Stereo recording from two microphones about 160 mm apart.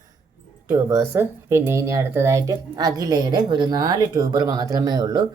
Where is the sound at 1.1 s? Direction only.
15° right (ahead or behind).